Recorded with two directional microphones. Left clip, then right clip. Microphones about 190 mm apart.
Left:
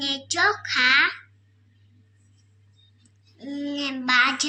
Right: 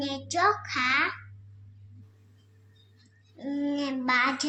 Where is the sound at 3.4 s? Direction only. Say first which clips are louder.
Left 1 dB; 25° right (ahead or behind).